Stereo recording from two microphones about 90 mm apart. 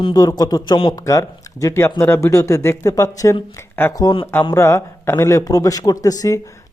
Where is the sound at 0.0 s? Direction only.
55° left (ahead or behind).